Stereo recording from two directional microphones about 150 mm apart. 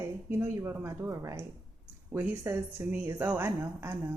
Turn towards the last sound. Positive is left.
turn(degrees=-15)  # may be behind; listen again after turning